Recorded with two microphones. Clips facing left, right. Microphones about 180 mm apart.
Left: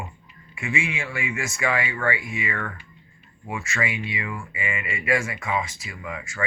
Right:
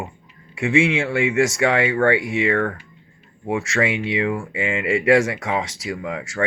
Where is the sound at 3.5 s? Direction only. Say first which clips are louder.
Right 8 dB; 90° right.